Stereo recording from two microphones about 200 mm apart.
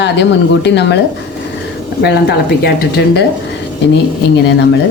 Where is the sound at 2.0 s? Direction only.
55° left (ahead or behind).